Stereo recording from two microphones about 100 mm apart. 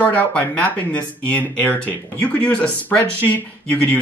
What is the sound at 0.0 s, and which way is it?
Speech, 15° left (ahead or behind).